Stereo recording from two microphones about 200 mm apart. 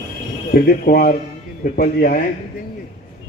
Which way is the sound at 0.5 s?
45° left (ahead or behind).